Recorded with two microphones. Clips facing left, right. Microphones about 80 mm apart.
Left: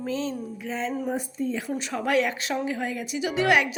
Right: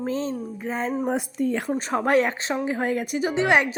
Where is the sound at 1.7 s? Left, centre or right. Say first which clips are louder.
Right 3 dB; right.